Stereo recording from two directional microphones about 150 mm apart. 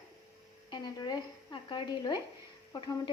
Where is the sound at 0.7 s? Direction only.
25° left (ahead or behind).